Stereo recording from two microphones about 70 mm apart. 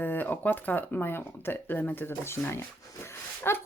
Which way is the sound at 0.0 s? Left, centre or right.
Left.